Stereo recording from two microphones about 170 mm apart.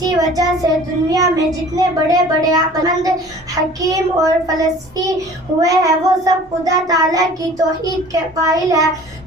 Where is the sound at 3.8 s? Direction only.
20° right (ahead or behind).